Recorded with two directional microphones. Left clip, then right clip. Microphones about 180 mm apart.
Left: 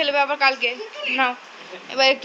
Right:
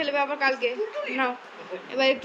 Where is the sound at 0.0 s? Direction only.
5° right (ahead or behind).